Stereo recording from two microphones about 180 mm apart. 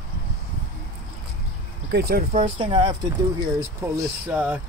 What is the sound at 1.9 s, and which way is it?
Speech, 65° right (ahead or behind).